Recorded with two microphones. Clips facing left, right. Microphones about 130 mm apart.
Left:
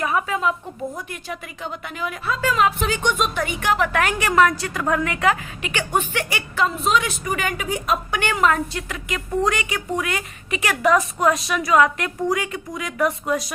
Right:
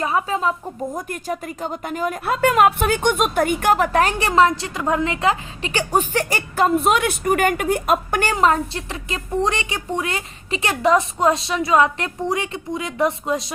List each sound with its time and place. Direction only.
0.0 s a woman's voice: 30° right (ahead or behind)
0.9 s a woman's voice: 45° right (ahead or behind); by 13.5 s 25° right (ahead or behind)